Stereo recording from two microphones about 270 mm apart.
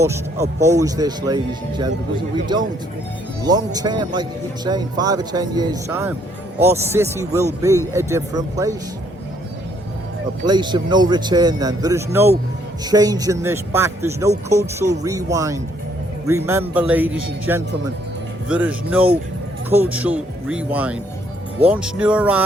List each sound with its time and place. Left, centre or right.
0.0 s speech: centre
10.4 s speech: centre